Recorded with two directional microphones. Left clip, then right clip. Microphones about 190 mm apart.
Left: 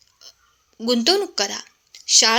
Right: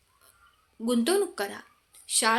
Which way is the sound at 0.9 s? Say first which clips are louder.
Left 7 dB; 25° left (ahead or behind).